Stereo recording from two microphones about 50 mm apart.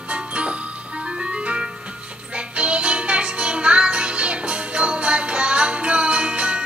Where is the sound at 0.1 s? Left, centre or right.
Right.